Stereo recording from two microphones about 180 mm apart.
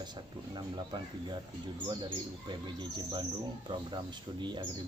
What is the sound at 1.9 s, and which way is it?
Speech, 25° right (ahead or behind).